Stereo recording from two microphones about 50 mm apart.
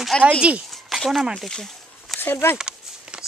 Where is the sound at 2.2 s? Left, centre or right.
Left.